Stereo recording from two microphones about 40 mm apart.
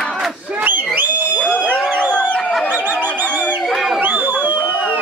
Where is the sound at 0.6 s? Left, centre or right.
Right.